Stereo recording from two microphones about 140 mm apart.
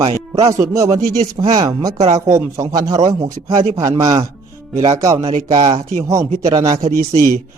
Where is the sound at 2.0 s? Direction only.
50° right (ahead or behind).